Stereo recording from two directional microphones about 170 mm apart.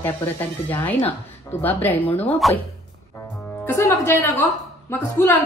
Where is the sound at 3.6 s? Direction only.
15° left (ahead or behind).